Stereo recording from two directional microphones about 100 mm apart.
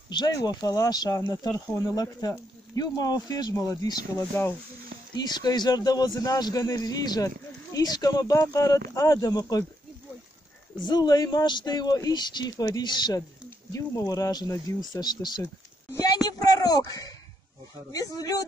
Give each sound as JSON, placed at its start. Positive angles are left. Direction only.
{"t": 0.2, "sound": "speech", "side_deg": 40}
{"t": 4.3, "sound": "speech", "side_deg": 30}
{"t": 5.1, "sound": "speech", "side_deg": 45}
{"t": 10.8, "sound": "speech", "side_deg": 45}
{"t": 16.0, "sound": "a sound", "side_deg": 40}
{"t": 17.9, "sound": "speech", "side_deg": 40}